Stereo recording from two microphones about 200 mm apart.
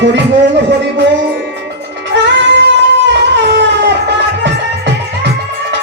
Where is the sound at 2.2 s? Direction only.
60° right (ahead or behind).